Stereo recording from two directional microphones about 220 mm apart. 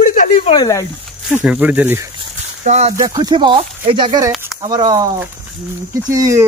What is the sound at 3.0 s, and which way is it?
Speech, 15° right (ahead or behind).